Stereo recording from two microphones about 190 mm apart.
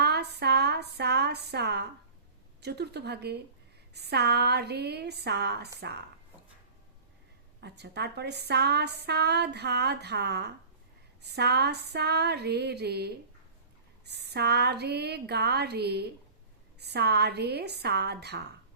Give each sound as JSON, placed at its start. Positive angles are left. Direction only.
{"t": 0.0, "sound": "a sound", "side_deg": -60}
{"t": 2.6, "sound": "a woman's voice", "side_deg": -60}
{"t": 7.6, "sound": "a woman's voice", "side_deg": -60}